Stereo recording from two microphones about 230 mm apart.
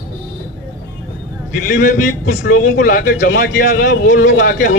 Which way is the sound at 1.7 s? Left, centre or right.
Left.